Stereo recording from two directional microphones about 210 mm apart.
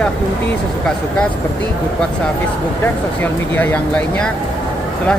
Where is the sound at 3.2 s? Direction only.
10° left (ahead or behind).